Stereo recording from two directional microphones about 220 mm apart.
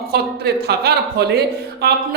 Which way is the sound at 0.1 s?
45° right (ahead or behind).